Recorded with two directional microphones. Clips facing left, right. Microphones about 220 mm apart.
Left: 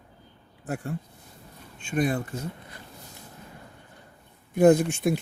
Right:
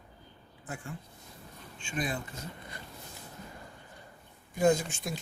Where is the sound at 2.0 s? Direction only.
65° left (ahead or behind).